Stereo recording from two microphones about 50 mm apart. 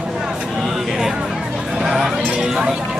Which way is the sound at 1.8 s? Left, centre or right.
Centre.